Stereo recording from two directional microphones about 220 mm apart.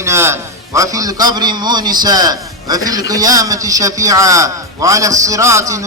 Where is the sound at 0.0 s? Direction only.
10° right (ahead or behind).